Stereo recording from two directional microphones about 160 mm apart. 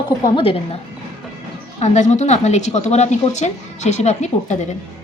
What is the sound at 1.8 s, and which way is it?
A woman's voice, 45° left (ahead or behind).